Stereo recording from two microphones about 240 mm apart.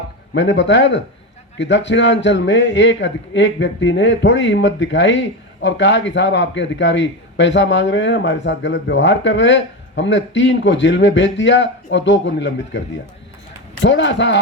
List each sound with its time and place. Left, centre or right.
0.3 s a man's voice: left